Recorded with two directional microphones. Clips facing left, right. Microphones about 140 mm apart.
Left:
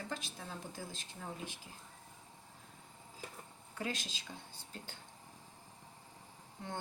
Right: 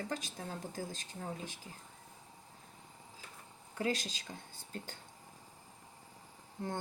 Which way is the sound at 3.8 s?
40° right (ahead or behind).